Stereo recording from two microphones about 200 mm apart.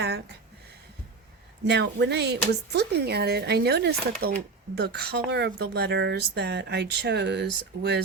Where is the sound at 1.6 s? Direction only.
60° right (ahead or behind).